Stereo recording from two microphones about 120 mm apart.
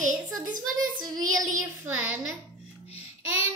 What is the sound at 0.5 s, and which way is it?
Child singing, 30° right (ahead or behind).